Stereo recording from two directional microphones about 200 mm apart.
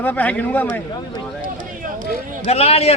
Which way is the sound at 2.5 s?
30° left (ahead or behind).